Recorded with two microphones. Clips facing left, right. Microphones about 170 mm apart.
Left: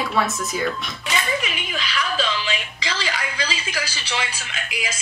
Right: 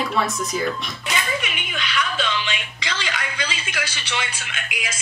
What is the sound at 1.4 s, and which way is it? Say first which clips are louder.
Speech: left 1 dB; 30° left (ahead or behind).